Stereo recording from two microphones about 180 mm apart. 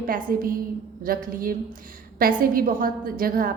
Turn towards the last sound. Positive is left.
turn(degrees=-50)  # may be behind; listen again after turning